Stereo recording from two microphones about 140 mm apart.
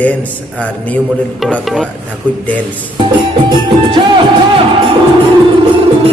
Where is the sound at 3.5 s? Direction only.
35° right (ahead or behind).